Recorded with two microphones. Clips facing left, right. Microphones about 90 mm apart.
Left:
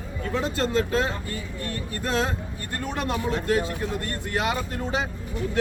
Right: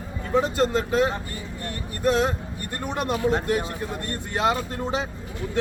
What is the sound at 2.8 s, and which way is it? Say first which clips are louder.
Speech: right 3 dB; 20° right (ahead or behind).